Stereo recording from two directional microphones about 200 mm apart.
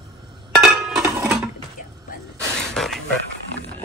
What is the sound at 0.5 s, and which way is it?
Chink, centre (ahead or behind).